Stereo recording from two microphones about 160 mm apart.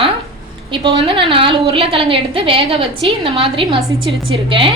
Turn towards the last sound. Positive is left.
turn(degrees=-35)  # may be behind; listen again after turning